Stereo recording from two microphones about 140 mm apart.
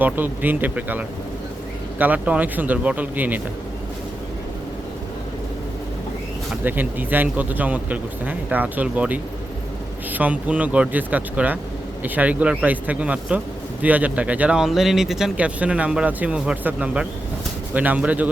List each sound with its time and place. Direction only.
0.0 s speech: 15° right (ahead or behind)
6.5 s speech: 15° right (ahead or behind)